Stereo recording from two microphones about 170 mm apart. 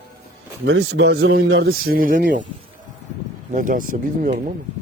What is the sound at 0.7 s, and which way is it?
Speech, 80° right.